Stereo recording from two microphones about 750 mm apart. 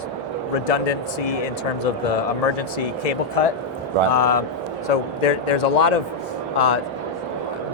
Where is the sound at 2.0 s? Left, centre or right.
Left.